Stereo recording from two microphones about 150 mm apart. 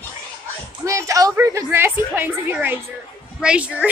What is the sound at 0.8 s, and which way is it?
A woman's voice, 20° right (ahead or behind).